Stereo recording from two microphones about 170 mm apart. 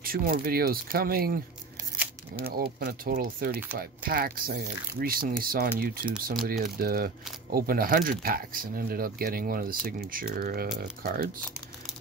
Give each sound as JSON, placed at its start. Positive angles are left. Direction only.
{"t": 0.0, "sound": "speech", "side_deg": -60}
{"t": 2.5, "sound": "speech", "side_deg": -60}